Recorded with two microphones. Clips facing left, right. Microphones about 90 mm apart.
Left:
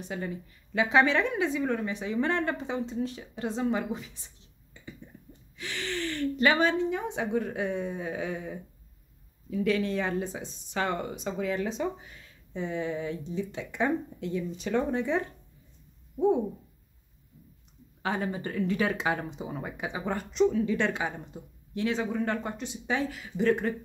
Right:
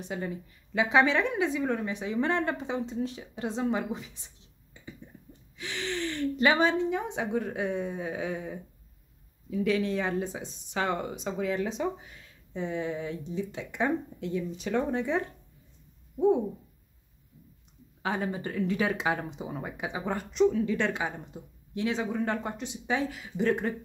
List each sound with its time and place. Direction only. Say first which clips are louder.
0.0 s a woman's voice: even; 20° right (ahead or behind)
5.6 s a woman's voice: right 1 dB; 20° right (ahead or behind)
9.7 s a woman's voice: even; 15° right (ahead or behind)
18.0 s a woman's voice: even; 5° right (ahead or behind)